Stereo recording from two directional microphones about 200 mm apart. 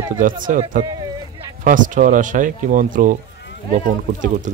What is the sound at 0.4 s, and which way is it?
Speech, 40° right (ahead or behind).